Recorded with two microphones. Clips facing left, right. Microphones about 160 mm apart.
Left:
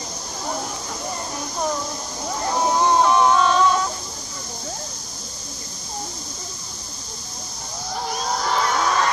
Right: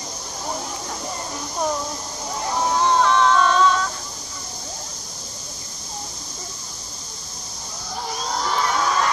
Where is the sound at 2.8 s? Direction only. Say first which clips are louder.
Left 1 dB; 15° left (ahead or behind).